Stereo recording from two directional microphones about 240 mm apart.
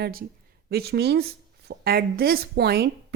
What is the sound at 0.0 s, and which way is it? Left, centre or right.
Speech, right.